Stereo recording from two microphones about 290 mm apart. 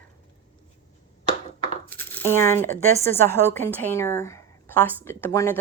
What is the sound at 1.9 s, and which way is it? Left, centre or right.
Speech, centre.